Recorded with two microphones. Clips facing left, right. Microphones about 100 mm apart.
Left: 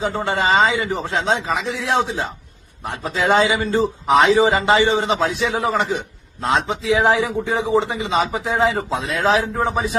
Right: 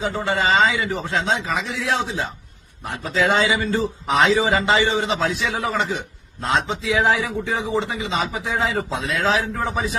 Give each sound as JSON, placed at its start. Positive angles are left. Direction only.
{"t": 0.2, "sound": "a man's voice", "side_deg": 25}